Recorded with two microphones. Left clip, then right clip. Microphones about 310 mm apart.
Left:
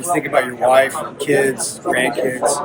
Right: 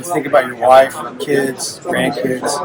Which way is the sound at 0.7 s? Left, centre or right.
Centre.